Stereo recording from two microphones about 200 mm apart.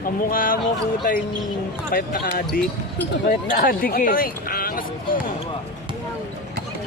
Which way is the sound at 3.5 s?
45° left (ahead or behind).